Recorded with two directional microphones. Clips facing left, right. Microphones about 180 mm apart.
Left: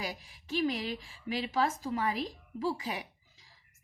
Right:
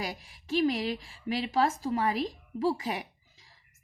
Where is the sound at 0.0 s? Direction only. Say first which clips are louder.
Right 2 dB; 45° right (ahead or behind).